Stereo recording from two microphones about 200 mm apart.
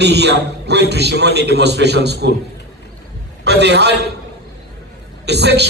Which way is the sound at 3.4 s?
55° right (ahead or behind).